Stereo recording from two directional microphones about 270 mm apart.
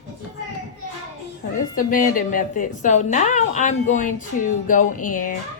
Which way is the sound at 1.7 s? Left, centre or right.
Left.